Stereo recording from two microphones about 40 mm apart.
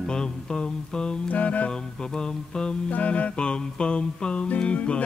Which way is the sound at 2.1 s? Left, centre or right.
Centre.